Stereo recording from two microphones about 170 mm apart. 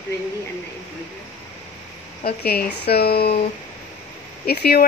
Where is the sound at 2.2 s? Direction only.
65° left (ahead or behind).